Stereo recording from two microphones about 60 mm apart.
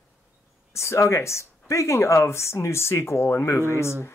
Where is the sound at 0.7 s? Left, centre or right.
Left.